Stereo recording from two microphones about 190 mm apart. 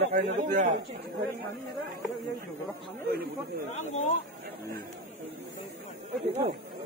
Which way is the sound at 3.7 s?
35° left (ahead or behind).